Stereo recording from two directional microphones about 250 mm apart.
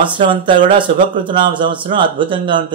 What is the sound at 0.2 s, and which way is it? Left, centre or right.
A man's voice, centre.